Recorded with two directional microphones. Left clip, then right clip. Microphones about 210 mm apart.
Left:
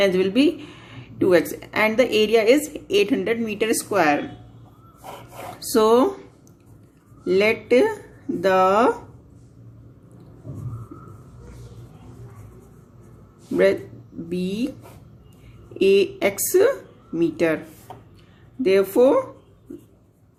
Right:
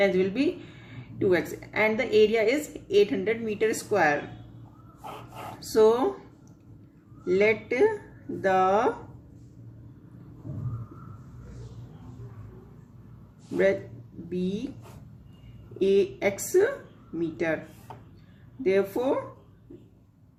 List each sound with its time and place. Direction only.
0.0 s speech: 50° left (ahead or behind)
5.5 s speech: 50° left (ahead or behind)
7.3 s speech: 50° left (ahead or behind)
14.3 s speech: 50° left (ahead or behind)
15.8 s speech: 50° left (ahead or behind)
18.6 s speech: 50° left (ahead or behind)